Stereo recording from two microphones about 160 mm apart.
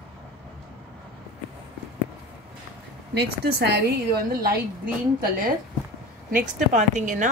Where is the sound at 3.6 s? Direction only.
90° right.